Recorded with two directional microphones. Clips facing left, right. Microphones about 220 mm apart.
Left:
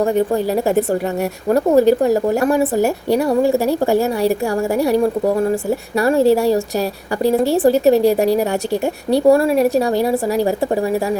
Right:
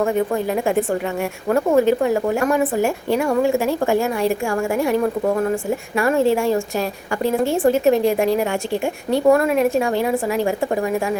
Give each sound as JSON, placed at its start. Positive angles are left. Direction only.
{"t": 0.0, "sound": "a woman's voice", "side_deg": 35}
{"t": 6.0, "sound": "a woman's voice", "side_deg": 35}